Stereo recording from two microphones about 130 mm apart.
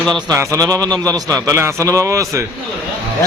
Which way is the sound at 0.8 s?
10° left (ahead or behind).